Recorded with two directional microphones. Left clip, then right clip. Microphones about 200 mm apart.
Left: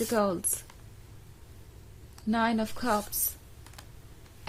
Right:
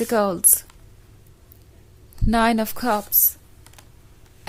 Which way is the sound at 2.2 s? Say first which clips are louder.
Right 9 dB; 35° right (ahead or behind).